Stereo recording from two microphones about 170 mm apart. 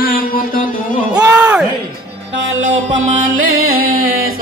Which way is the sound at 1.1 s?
5° right (ahead or behind).